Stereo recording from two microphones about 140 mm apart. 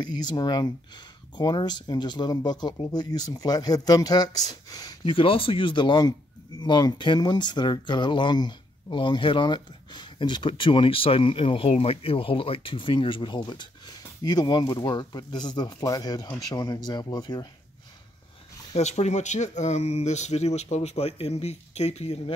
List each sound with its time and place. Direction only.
0.0 s speech: 30° left (ahead or behind)
5.1 s speech: 40° left (ahead or behind)
18.8 s speech: 55° left (ahead or behind)